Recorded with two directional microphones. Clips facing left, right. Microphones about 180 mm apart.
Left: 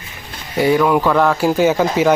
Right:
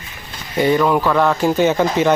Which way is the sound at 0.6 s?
5° left (ahead or behind).